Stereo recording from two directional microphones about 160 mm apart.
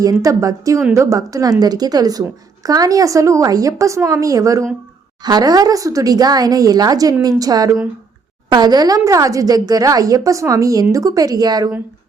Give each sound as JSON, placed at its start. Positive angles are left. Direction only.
{"t": 0.0, "sound": "speech", "side_deg": -20}